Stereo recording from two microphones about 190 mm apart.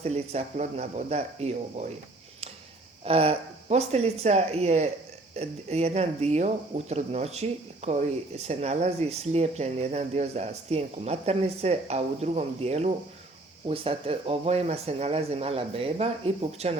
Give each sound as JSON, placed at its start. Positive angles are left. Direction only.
{"t": 0.0, "sound": "speech", "side_deg": -35}
{"t": 3.0, "sound": "speech", "side_deg": -30}